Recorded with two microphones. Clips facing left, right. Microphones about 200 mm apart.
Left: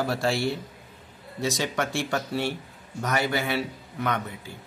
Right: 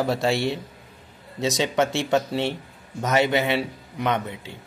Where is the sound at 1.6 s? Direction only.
20° right (ahead or behind).